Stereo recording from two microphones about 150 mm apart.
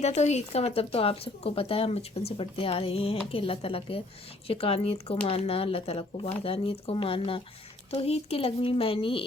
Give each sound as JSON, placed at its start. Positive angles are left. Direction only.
{"t": 0.0, "sound": "speech", "side_deg": 45}